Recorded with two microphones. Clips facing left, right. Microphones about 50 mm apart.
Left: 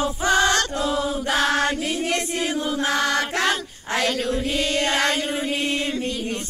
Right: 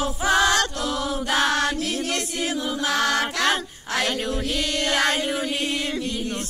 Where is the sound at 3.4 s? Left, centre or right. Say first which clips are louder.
Even; centre.